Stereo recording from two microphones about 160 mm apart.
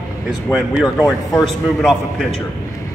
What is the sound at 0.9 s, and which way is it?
Speech, 20° left (ahead or behind).